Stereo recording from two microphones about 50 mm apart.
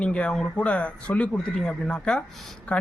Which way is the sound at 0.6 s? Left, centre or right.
Left.